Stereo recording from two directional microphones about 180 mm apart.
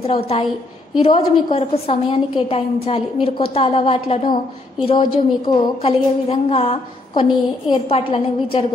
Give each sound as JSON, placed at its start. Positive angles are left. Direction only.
{"t": 0.0, "sound": "a woman's voice", "side_deg": 30}